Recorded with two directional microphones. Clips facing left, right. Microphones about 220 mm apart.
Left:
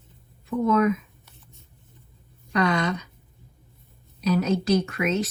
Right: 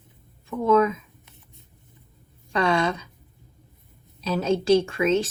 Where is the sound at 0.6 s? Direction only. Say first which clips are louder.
Right 2 dB; 30° right (ahead or behind).